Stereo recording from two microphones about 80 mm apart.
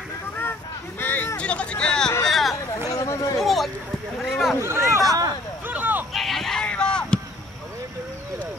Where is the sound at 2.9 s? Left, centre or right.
Left.